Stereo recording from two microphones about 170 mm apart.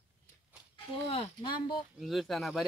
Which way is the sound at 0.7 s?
30° left (ahead or behind).